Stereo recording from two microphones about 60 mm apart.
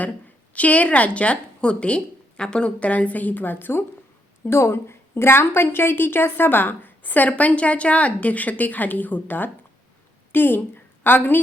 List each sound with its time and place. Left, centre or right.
0.5 s a woman's voice: left